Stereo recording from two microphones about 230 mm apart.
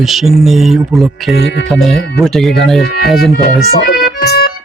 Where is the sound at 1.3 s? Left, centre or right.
Left.